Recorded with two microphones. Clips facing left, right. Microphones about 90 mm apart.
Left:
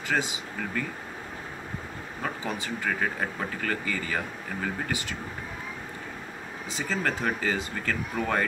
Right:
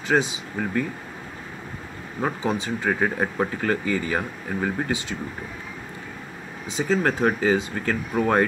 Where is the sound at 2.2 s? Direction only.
20° right (ahead or behind).